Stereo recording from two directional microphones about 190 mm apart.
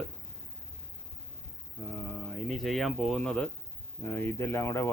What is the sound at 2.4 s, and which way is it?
Speech, centre (ahead or behind).